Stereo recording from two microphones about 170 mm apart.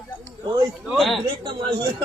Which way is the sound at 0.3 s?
15° right (ahead or behind).